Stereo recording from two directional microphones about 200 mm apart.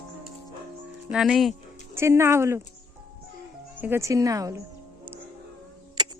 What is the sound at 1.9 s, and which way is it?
Speech, 15° right (ahead or behind).